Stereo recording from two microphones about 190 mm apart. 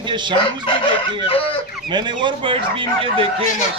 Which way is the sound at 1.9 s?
25° right (ahead or behind).